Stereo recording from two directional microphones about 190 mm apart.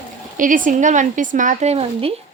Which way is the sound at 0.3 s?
45° right (ahead or behind).